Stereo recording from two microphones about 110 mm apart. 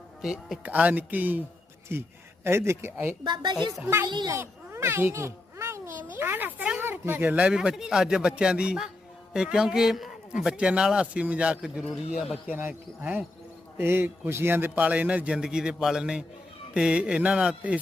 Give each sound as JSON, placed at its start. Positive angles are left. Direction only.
{"t": 0.2, "sound": "speech", "side_deg": 0}
{"t": 0.6, "sound": "speech", "side_deg": -15}
{"t": 3.2, "sound": "speech", "side_deg": -40}
{"t": 4.3, "sound": "a child's voice", "side_deg": -25}